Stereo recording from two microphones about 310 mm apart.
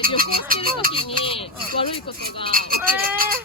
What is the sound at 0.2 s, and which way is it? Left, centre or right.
Music, right.